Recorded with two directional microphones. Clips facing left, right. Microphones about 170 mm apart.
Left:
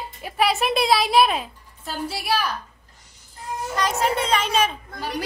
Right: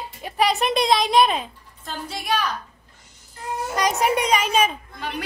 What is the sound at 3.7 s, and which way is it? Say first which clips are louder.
Speech: right 2 dB; 15° right (ahead or behind).